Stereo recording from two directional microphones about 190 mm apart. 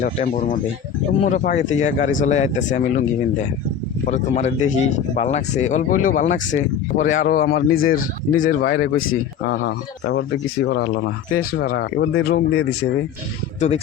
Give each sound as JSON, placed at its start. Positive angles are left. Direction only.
{"t": 0.0, "sound": "speech", "side_deg": 40}
{"t": 13.6, "sound": "speech", "side_deg": 35}